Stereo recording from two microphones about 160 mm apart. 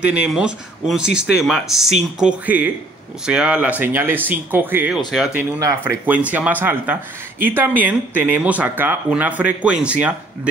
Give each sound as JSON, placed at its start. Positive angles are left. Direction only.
{"t": 0.0, "sound": "speech", "side_deg": -10}
{"t": 4.9, "sound": "speech", "side_deg": 0}
{"t": 5.6, "sound": "speech", "side_deg": -20}
{"t": 6.0, "sound": "speech", "side_deg": -10}